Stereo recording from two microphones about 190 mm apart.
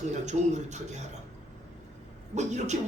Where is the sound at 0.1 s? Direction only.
35° right (ahead or behind).